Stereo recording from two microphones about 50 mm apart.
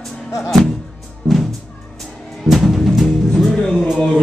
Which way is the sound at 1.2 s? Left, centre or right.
Centre.